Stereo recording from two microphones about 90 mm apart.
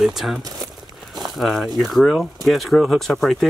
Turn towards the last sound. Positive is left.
turn(degrees=5)  # may be behind; listen again after turning